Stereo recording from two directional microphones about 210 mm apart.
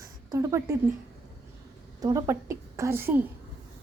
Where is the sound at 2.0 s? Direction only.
15° right (ahead or behind).